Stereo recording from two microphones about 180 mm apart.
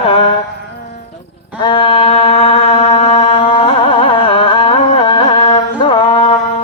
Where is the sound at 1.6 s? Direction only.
30° left (ahead or behind).